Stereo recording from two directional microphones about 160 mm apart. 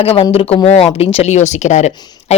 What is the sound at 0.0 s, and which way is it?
Speech, 35° left (ahead or behind).